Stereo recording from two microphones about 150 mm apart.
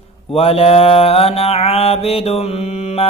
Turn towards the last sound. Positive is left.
turn(degrees=45)  # may be behind; listen again after turning